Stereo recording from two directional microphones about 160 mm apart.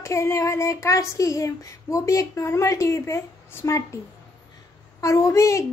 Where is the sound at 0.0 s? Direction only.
20° left (ahead or behind).